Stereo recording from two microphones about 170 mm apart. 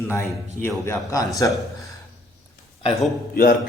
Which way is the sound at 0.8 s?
15° left (ahead or behind).